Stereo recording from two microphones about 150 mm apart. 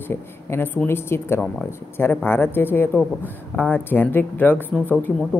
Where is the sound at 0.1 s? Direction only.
15° left (ahead or behind).